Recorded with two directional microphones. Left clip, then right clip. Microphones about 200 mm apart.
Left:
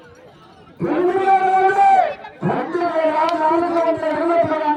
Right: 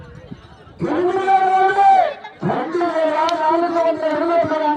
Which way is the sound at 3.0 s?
5° left (ahead or behind).